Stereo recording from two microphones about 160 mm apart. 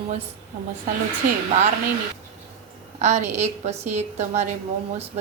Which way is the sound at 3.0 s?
45° right (ahead or behind).